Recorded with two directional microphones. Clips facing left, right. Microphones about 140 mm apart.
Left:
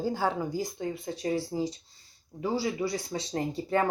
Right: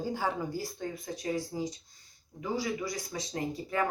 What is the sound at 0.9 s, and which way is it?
Speech, 30° left (ahead or behind).